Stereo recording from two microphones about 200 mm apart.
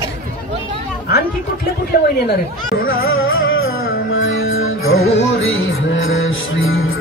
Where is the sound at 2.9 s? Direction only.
80° left.